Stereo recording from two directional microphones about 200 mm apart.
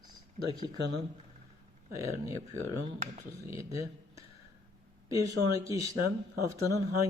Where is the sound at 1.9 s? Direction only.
15° right (ahead or behind).